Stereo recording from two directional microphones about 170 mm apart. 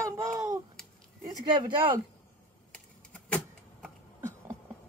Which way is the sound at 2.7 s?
5° left (ahead or behind).